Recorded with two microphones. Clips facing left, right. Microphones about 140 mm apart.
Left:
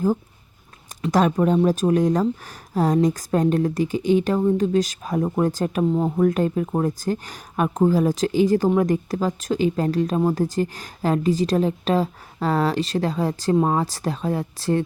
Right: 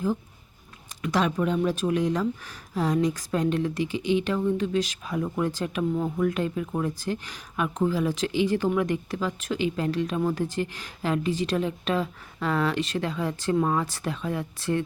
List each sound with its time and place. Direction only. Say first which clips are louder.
1.1 s speech: left 6 dB; 45° left (ahead or behind)